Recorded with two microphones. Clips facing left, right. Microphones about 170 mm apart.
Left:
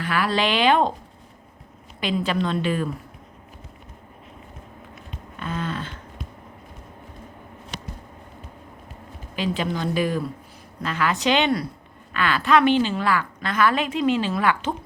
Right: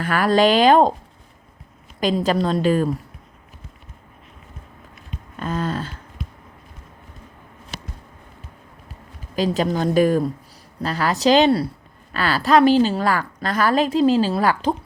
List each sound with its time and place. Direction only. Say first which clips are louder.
0.0 s a woman's voice: right 6 dB; 45° right (ahead or behind)
2.0 s a woman's voice: right 4 dB; 40° right (ahead or behind)
5.4 s a sound: right 4 dB; 40° right (ahead or behind)
9.3 s a woman's voice: right 5 dB; 40° right (ahead or behind)